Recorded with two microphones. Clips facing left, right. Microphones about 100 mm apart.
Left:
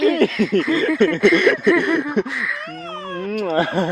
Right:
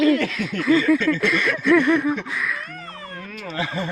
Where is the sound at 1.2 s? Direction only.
70° left (ahead or behind).